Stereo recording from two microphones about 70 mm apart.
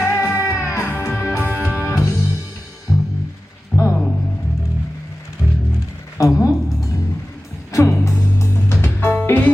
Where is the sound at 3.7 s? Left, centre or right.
Centre.